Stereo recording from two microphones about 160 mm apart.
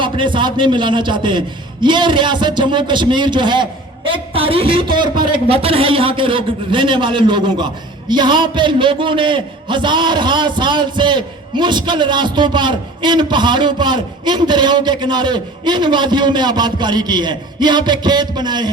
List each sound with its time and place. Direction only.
0.0 s a man's voice: 30° right (ahead or behind)